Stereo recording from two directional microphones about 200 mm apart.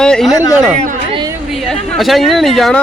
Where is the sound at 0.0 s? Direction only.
Centre (ahead or behind).